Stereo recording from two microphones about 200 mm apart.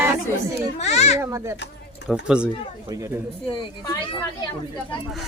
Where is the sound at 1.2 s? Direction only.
15° right (ahead or behind).